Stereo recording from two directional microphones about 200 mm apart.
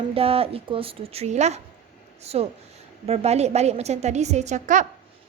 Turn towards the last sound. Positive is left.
turn(degrees=-35)  # may be behind; listen again after turning